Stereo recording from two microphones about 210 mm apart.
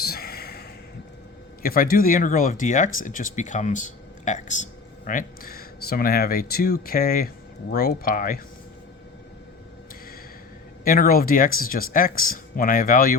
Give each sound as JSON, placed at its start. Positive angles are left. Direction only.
{"t": 0.0, "sound": "sigh", "side_deg": 45}
{"t": 1.6, "sound": "speech", "side_deg": 45}
{"t": 10.8, "sound": "speech", "side_deg": 45}